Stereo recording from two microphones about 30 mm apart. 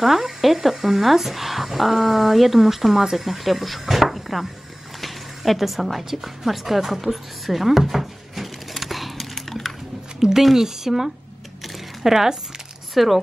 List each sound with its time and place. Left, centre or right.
0.0 s speech: centre
5.0 s a sound: centre
10.3 s speech: centre